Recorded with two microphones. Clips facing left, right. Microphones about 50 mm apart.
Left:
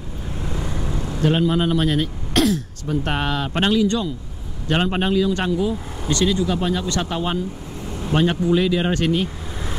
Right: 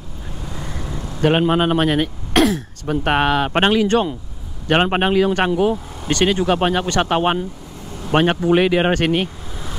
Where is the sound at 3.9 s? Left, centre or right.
Right.